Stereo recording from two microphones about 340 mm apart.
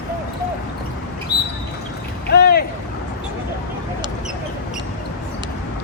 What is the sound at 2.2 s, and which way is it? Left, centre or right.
Rowboat, left.